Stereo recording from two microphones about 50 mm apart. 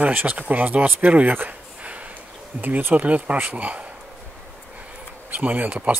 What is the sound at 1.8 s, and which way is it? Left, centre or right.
Snort, right.